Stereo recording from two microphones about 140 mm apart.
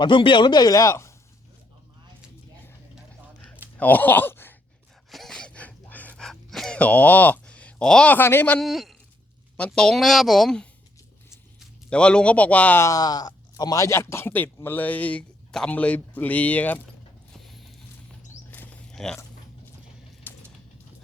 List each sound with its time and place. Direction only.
0.0 s speech: 35° left (ahead or behind); by 1.1 s 20° left (ahead or behind)
3.8 s speech: 10° left (ahead or behind)
5.1 s gasp: 5° left (ahead or behind)
8.6 s speech: centre (ahead or behind)
11.9 s a man's voice: 5° left (ahead or behind)
17.4 s mechanisms: centre (ahead or behind)
18.5 s a sound: 10° left (ahead or behind)
20.3 s a sound: 15° left (ahead or behind)